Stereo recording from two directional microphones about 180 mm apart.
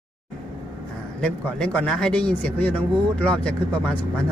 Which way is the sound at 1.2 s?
5° left (ahead or behind).